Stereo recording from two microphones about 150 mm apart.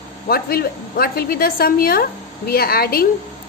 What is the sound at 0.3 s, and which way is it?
A woman's voice, 90° left.